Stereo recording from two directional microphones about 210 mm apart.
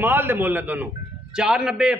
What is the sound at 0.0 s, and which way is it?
A man's voice, 10° right (ahead or behind).